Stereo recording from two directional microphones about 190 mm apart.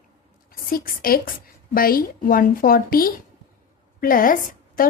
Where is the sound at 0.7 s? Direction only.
50° left (ahead or behind).